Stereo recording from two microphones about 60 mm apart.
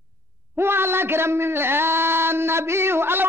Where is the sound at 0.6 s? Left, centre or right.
Right.